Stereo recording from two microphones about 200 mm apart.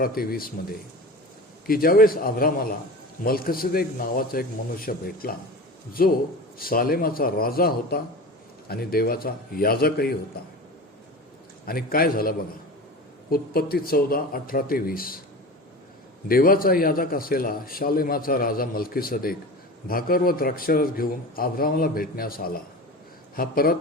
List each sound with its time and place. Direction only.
0.0 s a man's voice: 50° left (ahead or behind)
1.6 s a man's voice: 45° left (ahead or behind)
11.6 s a man's voice: 45° left (ahead or behind)
16.3 s a man's voice: 45° left (ahead or behind)